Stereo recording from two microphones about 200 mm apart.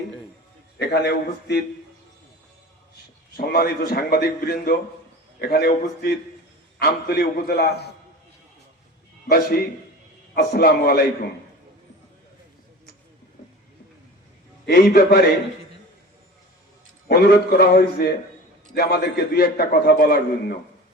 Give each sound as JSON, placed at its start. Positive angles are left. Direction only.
{"t": 0.8, "sound": "a man's voice", "side_deg": 55}
{"t": 3.3, "sound": "a man's voice", "side_deg": 50}
{"t": 9.3, "sound": "a man's voice", "side_deg": 50}
{"t": 14.7, "sound": "a man's voice", "side_deg": 55}
{"t": 17.1, "sound": "a man's voice", "side_deg": 50}